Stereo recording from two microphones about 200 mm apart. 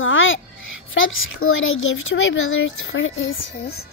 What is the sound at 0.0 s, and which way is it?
Music, 75° left (ahead or behind).